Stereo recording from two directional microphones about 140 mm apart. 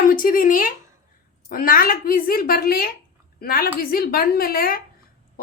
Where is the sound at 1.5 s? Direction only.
90° left.